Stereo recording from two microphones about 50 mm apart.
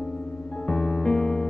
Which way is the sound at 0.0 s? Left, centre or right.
Left.